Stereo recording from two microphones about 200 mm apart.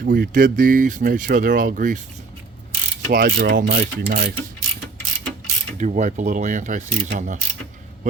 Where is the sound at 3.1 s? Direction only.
45° right (ahead or behind).